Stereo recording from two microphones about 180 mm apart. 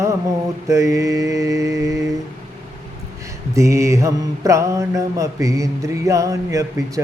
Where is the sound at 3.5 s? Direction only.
15° right (ahead or behind).